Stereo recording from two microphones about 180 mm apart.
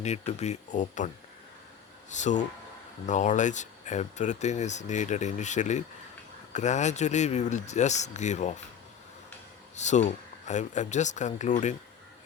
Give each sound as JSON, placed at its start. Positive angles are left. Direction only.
{"t": 0.0, "sound": "speech", "side_deg": 40}
{"t": 9.7, "sound": "speech", "side_deg": 40}